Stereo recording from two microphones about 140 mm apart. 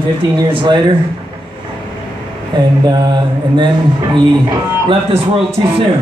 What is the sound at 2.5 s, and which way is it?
Speech, 30° right (ahead or behind).